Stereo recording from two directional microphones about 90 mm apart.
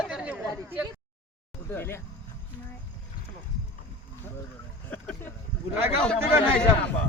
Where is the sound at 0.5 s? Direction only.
20° right (ahead or behind).